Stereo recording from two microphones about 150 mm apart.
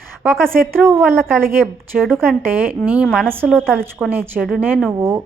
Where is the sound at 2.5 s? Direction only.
10° right (ahead or behind).